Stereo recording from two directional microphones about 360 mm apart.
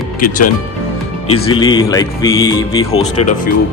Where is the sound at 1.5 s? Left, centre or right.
Centre.